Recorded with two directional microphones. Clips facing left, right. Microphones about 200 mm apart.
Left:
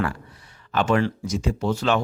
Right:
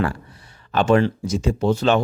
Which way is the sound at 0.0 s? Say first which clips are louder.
Right 3 dB; 30° right (ahead or behind).